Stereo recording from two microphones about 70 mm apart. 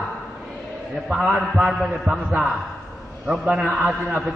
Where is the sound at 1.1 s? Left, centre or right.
Centre.